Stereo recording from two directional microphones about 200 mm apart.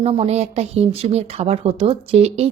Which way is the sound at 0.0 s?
30° right (ahead or behind).